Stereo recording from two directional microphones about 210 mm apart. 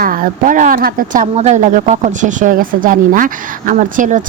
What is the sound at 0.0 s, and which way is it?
A woman's voice, 40° right (ahead or behind).